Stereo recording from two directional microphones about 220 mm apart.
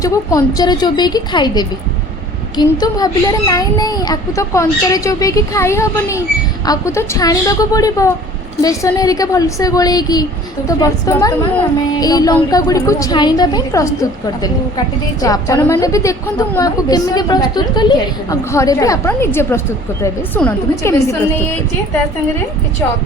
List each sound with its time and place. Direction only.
0.0 s a woman's voice: 15° left (ahead or behind)